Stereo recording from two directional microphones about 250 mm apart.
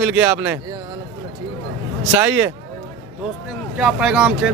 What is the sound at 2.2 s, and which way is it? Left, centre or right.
Speech, centre.